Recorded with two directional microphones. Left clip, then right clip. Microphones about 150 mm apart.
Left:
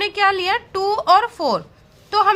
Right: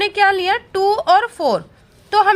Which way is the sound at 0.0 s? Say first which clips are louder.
Right 3 dB; 20° right (ahead or behind).